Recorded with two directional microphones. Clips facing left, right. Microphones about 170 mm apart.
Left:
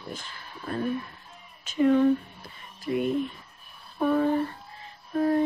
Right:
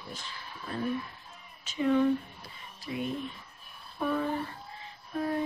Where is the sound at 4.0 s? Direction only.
45° left (ahead or behind).